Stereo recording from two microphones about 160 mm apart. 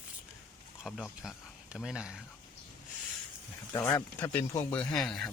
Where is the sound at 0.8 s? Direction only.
Centre (ahead or behind).